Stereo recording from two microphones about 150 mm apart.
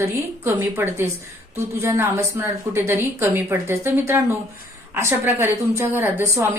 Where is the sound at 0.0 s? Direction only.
15° right (ahead or behind).